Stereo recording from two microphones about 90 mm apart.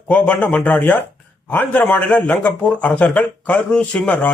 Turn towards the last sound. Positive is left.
turn(degrees=15)  # may be behind; listen again after turning